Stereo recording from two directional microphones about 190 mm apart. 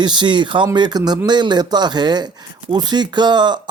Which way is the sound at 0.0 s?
25° right (ahead or behind).